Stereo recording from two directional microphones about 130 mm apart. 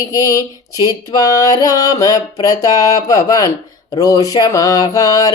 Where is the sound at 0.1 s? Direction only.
25° left (ahead or behind).